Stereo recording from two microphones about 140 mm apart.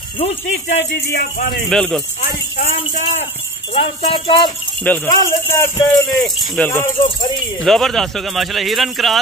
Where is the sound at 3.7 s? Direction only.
40° left (ahead or behind).